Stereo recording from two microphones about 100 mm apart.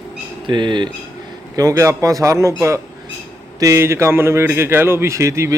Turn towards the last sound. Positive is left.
turn(degrees=-30)  # may be behind; listen again after turning